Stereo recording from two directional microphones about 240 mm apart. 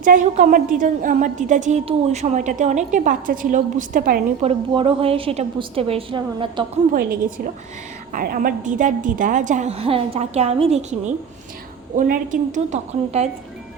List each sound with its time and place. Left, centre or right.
0.0 s a woman's voice: right
4.7 s a woman's voice: right
6.9 s a woman's voice: right